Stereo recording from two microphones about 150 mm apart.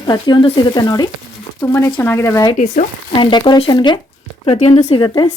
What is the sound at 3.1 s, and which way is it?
Speech, 30° left (ahead or behind).